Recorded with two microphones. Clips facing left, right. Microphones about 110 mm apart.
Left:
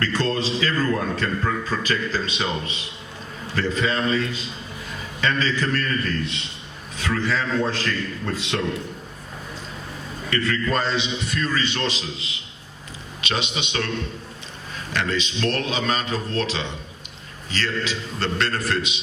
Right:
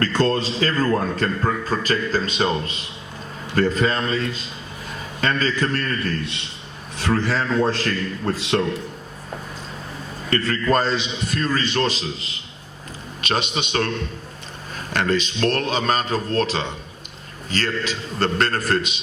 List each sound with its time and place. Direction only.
0.0 s a man's voice: 40° right (ahead or behind)
10.2 s a man's voice: 40° right (ahead or behind)
14.9 s a man's voice: 45° right (ahead or behind)